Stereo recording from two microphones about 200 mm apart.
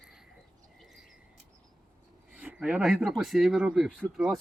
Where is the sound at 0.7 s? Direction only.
Centre (ahead or behind).